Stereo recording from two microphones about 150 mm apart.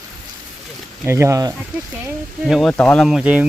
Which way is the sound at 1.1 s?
20° right (ahead or behind).